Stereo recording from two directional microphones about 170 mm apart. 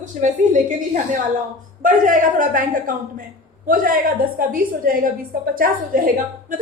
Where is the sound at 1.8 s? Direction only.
50° right (ahead or behind).